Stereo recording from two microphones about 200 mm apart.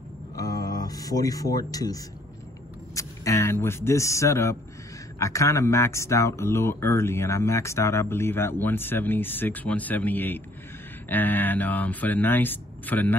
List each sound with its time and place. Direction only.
0.4 s speech: 20° left (ahead or behind)